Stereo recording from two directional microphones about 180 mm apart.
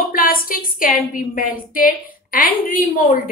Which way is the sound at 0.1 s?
50° left (ahead or behind).